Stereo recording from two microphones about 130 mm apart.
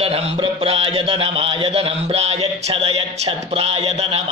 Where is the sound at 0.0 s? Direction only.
45° right (ahead or behind).